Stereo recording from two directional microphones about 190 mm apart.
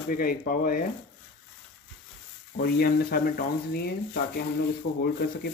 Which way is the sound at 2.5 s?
55° left (ahead or behind).